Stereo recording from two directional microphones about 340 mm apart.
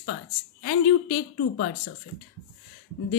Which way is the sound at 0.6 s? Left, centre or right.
Left.